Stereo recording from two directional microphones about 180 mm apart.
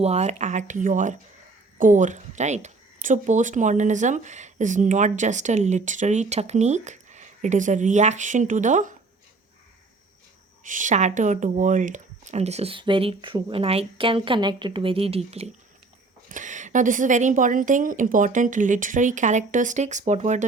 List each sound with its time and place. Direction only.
0.0 s a woman's voice: 35° right (ahead or behind)
10.6 s speech: 45° right (ahead or behind)
16.3 s a woman's voice: 45° right (ahead or behind)